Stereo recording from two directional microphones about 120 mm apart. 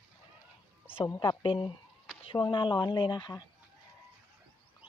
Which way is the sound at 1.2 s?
45° left (ahead or behind).